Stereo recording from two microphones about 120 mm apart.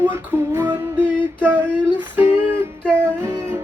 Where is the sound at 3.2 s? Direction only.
20° right (ahead or behind).